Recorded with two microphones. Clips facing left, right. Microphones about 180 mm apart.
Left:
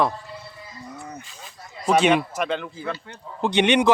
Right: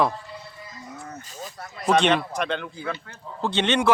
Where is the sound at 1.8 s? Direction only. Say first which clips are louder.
Left 2 dB; 10° left (ahead or behind).